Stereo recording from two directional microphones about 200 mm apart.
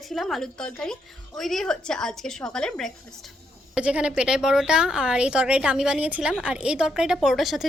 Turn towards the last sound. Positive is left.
turn(degrees=0)  # may be behind; listen again after turning